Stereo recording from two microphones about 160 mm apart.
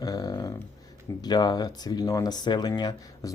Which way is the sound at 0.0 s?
25° left (ahead or behind).